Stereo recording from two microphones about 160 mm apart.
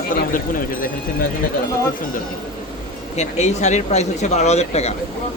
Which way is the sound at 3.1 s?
45° left (ahead or behind).